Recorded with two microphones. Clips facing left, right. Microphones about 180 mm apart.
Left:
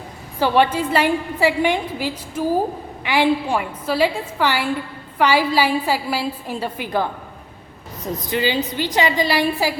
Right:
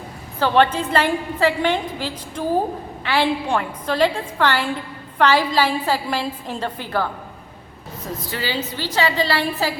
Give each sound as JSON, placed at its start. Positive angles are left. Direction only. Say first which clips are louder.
{"t": 0.3, "sound": "a woman's voice", "louder": "even", "side_deg": 10}